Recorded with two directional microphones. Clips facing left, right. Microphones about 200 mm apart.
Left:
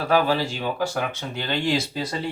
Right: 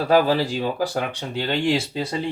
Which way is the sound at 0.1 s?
35° right (ahead or behind).